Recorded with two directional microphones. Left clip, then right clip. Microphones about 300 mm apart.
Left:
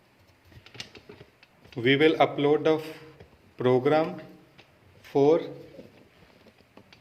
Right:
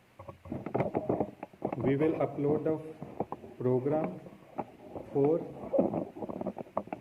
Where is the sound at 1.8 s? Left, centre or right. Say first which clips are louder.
Left 9 dB; centre.